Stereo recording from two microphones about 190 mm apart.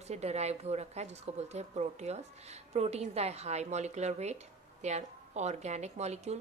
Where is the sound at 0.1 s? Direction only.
35° right (ahead or behind).